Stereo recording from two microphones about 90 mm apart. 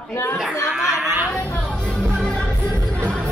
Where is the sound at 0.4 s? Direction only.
10° right (ahead or behind).